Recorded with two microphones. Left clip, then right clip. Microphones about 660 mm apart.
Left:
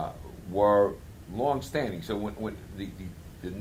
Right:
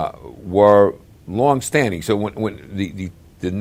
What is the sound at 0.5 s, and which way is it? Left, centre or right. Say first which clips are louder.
Speech: right 11 dB; right.